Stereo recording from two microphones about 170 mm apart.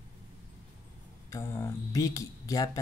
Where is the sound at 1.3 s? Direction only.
15° left (ahead or behind).